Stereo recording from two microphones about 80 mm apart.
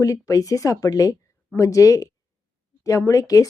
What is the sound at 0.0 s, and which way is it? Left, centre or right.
Speech, left.